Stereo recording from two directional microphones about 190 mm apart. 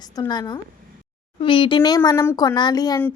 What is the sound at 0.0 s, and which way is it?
A woman's voice, 20° left (ahead or behind).